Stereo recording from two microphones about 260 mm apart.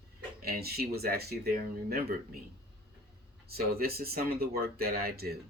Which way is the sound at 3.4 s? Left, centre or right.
Right.